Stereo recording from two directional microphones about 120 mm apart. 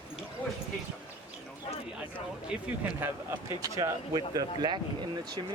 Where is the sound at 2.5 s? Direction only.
5° right (ahead or behind).